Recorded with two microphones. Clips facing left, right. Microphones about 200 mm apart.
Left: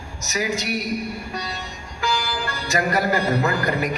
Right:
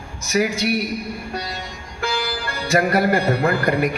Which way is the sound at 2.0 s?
60° right (ahead or behind).